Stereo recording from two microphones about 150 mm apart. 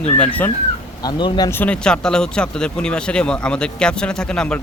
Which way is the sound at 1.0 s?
25° left (ahead or behind).